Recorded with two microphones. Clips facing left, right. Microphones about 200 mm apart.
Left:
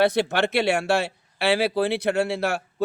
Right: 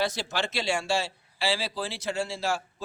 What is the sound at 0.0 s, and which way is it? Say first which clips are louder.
Speech: left 9 dB; 60° left (ahead or behind).